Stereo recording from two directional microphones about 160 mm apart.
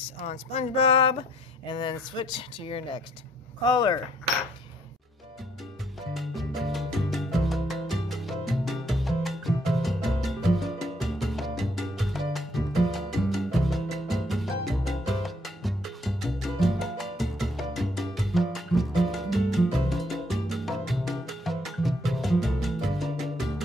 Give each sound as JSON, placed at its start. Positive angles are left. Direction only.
{"t": 0.3, "sound": "speech", "side_deg": 45}
{"t": 5.9, "sound": "music", "side_deg": 0}